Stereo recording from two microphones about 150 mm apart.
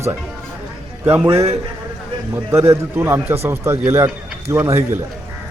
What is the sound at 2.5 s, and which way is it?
A man's voice, 15° right (ahead or behind).